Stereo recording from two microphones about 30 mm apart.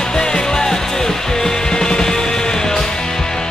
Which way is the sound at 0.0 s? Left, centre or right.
Left.